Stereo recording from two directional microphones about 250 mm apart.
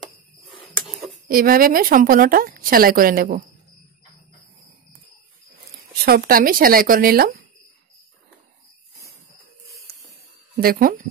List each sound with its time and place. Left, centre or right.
0.5 s a sound: centre
1.3 s a woman's voice: right
6.0 s a woman's voice: right
10.5 s speech: right